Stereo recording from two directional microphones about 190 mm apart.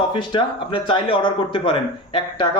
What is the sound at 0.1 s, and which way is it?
Speech, 25° left (ahead or behind).